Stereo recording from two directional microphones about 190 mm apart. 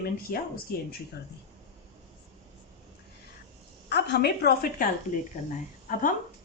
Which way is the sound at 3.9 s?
60° left (ahead or behind).